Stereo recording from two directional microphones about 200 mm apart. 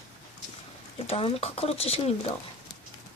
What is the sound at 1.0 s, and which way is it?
Speech, 30° left (ahead or behind).